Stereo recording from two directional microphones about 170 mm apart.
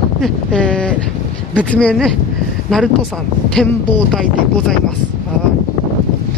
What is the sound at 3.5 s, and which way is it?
Speech, 5° left (ahead or behind).